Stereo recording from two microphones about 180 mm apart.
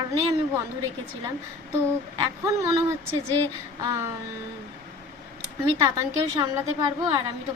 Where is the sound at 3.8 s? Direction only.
15° right (ahead or behind).